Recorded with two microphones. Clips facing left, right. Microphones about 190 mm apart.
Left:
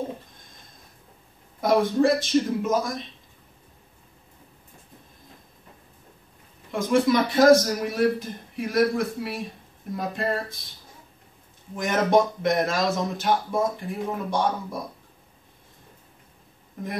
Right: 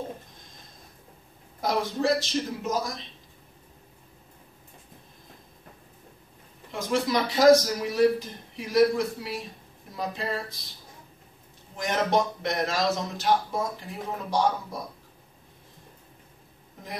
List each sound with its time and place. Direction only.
1.6 s speech: 55° left (ahead or behind)
6.7 s speech: 55° left (ahead or behind)
11.7 s speech: 50° left (ahead or behind)